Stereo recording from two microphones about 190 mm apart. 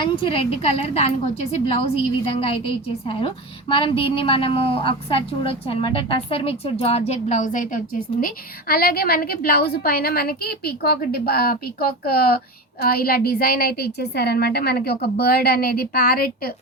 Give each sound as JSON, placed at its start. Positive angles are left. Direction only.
{"t": 0.0, "sound": "a woman's voice", "side_deg": 30}